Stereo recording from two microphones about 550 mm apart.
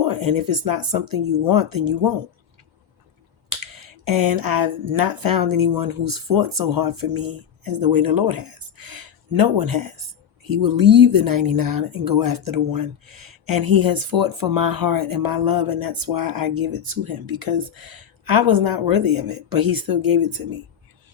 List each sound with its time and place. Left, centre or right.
0.0 s speech: right
3.6 s speech: right